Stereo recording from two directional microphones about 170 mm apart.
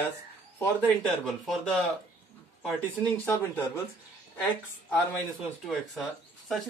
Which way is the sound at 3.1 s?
10° left (ahead or behind).